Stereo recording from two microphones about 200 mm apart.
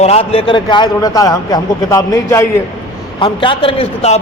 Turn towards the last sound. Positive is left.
turn(degrees=30)  # may be behind; listen again after turning